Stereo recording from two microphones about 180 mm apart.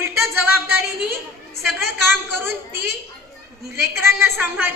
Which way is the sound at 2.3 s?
15° right (ahead or behind).